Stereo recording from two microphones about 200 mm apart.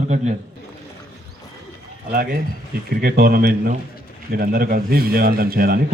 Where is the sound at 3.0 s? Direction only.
45° right (ahead or behind).